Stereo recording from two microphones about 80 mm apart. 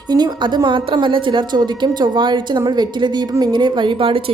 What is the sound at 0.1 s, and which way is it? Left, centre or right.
A woman's voice, right.